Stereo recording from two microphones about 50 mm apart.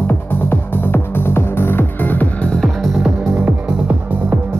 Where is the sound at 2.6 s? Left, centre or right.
Centre.